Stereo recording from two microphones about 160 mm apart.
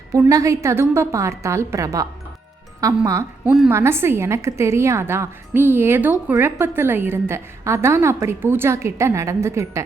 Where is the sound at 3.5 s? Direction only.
10° right (ahead or behind).